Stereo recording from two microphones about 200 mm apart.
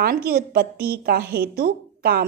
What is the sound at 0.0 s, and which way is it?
A woman's voice, 50° right (ahead or behind).